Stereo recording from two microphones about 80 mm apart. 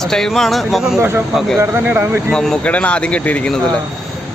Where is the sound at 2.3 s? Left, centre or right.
Centre.